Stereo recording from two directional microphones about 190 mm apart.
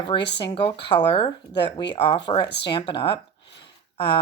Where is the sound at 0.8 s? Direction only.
25° left (ahead or behind).